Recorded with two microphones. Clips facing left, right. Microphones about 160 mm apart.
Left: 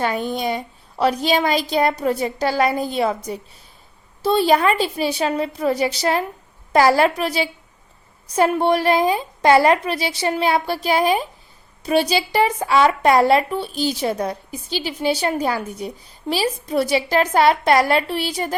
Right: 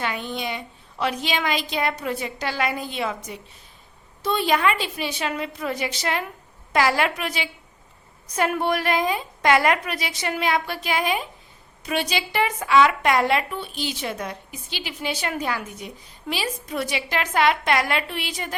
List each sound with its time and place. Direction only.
0.0 s a woman's voice: 40° left (ahead or behind)
4.2 s a woman's voice: 35° left (ahead or behind)